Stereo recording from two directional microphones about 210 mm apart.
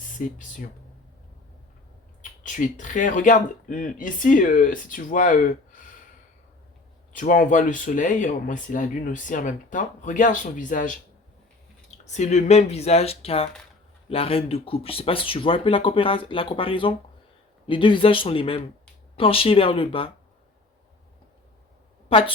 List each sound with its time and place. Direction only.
0.2 s speech: 40° left (ahead or behind)
2.4 s speech: 35° left (ahead or behind)
7.2 s speech: 40° left (ahead or behind)